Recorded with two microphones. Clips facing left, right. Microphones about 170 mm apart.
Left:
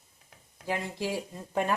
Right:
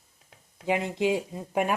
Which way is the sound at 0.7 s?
20° right (ahead or behind).